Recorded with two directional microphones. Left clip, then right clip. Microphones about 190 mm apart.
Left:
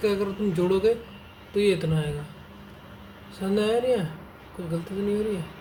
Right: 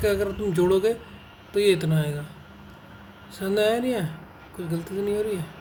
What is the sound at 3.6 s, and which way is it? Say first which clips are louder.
Speech: even; 55° right (ahead or behind).